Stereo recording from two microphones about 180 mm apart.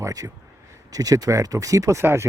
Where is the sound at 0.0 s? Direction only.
20° right (ahead or behind).